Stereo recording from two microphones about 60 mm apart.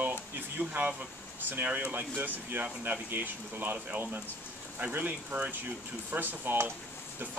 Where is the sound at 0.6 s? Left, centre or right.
Right.